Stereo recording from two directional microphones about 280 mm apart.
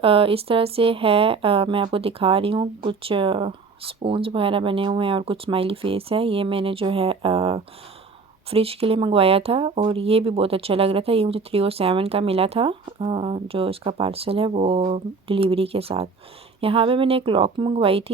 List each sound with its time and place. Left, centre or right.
0.0 s speech: centre